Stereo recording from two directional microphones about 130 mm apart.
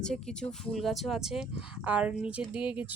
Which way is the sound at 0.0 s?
5° left (ahead or behind).